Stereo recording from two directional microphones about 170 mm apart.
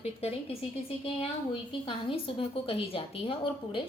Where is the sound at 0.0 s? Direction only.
35° left (ahead or behind).